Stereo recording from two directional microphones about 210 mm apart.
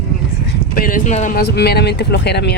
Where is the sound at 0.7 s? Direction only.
40° left (ahead or behind).